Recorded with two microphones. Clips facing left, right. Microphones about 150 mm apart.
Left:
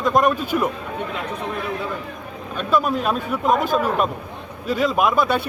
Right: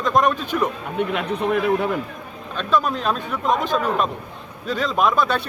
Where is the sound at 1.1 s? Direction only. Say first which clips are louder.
Right 6 dB; 65° right (ahead or behind).